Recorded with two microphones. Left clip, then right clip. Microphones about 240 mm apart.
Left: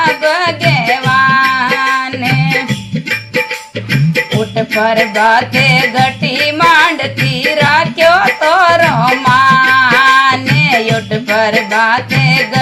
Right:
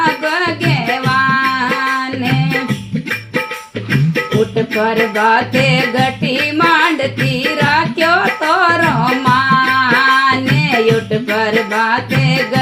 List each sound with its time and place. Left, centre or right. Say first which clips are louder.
0.0 s music: left 4 dB; left
4.7 s music: left 3 dB; left